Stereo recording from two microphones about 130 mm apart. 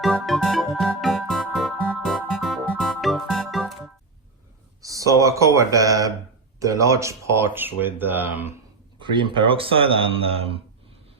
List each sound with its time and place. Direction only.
0.0 s music: centre (ahead or behind)
4.8 s a sound: 25° right (ahead or behind)
5.2 s speech: 25° right (ahead or behind)
9.0 s speech: 40° right (ahead or behind)